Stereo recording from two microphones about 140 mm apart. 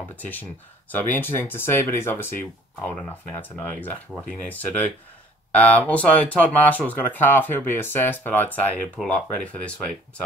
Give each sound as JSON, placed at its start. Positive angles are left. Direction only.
{"t": 0.1, "sound": "speech", "side_deg": 10}